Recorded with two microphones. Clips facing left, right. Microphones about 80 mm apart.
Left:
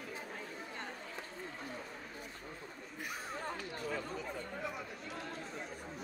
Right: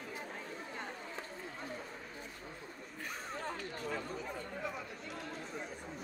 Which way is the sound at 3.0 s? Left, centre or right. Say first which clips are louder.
Even; centre.